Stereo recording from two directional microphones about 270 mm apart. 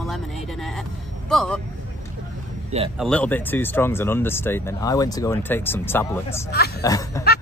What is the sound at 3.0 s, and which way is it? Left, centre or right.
Speech, centre.